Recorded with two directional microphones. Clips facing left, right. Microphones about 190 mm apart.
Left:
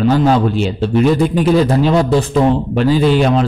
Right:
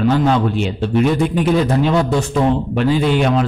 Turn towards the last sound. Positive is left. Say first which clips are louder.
# left 3 dB
turn(degrees=35)  # may be behind; listen again after turning